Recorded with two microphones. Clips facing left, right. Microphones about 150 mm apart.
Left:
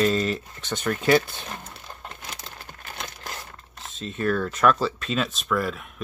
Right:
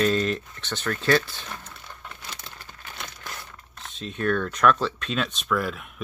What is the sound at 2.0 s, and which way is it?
Crumpling, 45° left (ahead or behind).